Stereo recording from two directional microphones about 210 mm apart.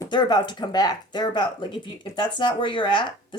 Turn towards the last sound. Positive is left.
turn(degrees=20)  # may be behind; listen again after turning